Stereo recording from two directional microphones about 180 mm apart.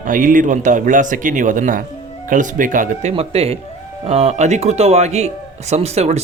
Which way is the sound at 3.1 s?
35° right (ahead or behind).